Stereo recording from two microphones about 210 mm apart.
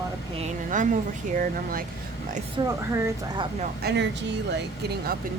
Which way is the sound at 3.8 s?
55° right (ahead or behind).